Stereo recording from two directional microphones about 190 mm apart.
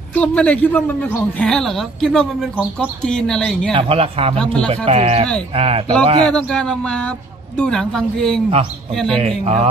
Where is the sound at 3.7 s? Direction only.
30° right (ahead or behind).